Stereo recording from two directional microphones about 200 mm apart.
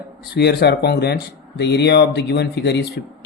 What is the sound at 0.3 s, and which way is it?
Speech, 55° left (ahead or behind).